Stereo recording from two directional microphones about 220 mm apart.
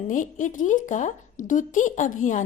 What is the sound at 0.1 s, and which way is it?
A woman's voice, 35° left (ahead or behind).